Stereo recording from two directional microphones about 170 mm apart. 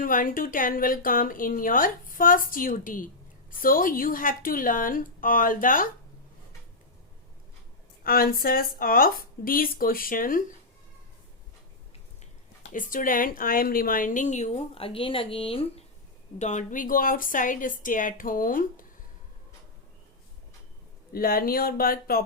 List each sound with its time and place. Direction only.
0.0 s a woman's voice: 55° left (ahead or behind)
8.0 s speech: 60° left (ahead or behind)
12.7 s a woman's voice: 50° left (ahead or behind); by 15.8 s 35° left (ahead or behind)
16.4 s a woman's voice: 45° left (ahead or behind)
21.1 s speech: 60° left (ahead or behind)